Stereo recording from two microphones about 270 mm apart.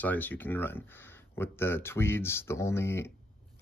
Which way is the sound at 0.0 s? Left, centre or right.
Centre.